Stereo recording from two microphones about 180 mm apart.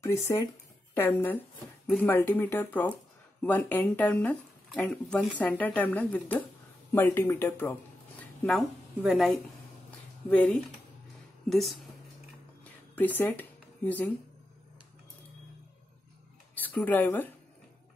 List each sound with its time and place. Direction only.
0.0 s speech: 15° left (ahead or behind)
8.2 s a sound: 5° left (ahead or behind)
9.0 s a woman's voice: centre (ahead or behind)
10.3 s a woman's voice: 5° left (ahead or behind)
12.9 s speech: 10° left (ahead or behind)
16.5 s speech: 10° left (ahead or behind)